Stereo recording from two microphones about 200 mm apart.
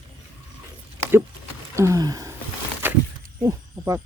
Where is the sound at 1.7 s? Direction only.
15° right (ahead or behind).